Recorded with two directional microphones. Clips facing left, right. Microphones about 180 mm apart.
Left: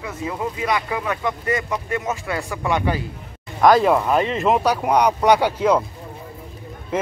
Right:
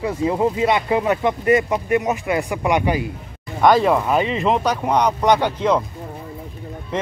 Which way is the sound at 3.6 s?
Centre (ahead or behind).